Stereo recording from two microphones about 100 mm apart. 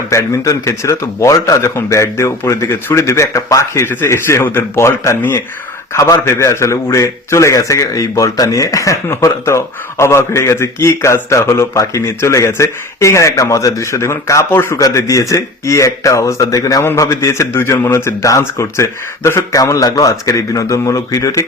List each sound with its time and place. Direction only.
0.1 s a man's voice: 30° left (ahead or behind)
14.8 s a man's voice: 35° left (ahead or behind)